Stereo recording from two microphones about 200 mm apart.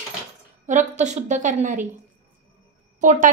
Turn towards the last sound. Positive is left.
turn(degrees=-40)  # may be behind; listen again after turning